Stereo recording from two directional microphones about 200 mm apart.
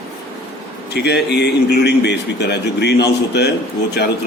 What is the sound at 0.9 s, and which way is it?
A man's voice, 55° left (ahead or behind).